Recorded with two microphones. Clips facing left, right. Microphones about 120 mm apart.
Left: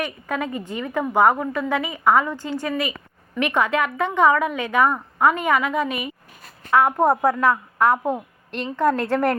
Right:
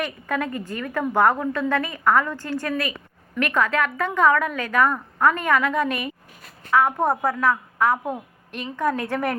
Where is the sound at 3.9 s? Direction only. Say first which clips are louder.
Left 2 dB; 20° left (ahead or behind).